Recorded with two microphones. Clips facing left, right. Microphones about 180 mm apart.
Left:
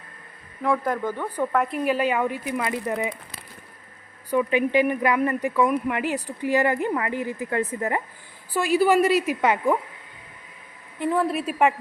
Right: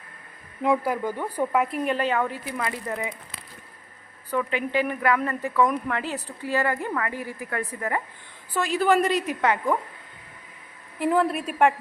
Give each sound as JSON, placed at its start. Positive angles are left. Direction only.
{"t": 0.8, "sound": "speech", "side_deg": -10}
{"t": 4.3, "sound": "speech", "side_deg": 15}
{"t": 8.5, "sound": "speech", "side_deg": 10}
{"t": 11.0, "sound": "a woman's voice", "side_deg": 0}